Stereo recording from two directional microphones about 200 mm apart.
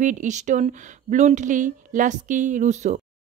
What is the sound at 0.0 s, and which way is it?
Speech, 40° right (ahead or behind).